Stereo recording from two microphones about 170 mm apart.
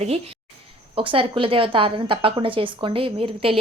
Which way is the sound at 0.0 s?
35° right (ahead or behind).